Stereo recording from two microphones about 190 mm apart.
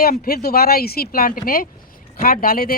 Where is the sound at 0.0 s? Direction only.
50° left (ahead or behind).